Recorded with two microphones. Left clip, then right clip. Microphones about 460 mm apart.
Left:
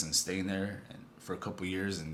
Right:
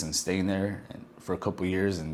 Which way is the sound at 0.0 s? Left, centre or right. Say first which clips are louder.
Right 4 dB; centre.